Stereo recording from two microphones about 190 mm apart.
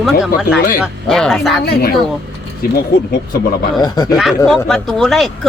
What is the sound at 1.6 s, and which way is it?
Speech, 50° left (ahead or behind).